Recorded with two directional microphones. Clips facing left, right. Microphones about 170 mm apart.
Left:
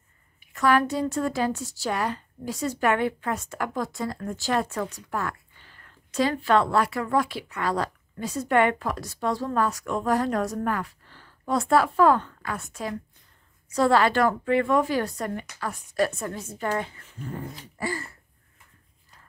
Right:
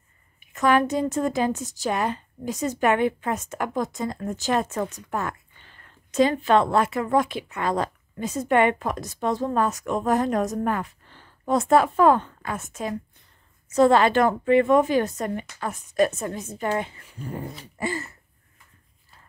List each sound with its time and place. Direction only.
0.4 s a woman's voice: 20° right (ahead or behind)